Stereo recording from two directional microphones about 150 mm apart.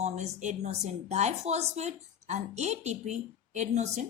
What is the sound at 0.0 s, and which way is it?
A woman's voice, 50° right (ahead or behind).